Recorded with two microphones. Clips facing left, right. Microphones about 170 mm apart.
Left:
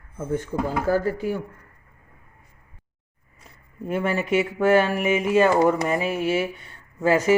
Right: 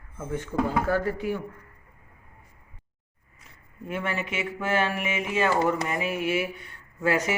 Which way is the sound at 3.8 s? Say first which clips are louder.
Left 7 dB; 35° left (ahead or behind).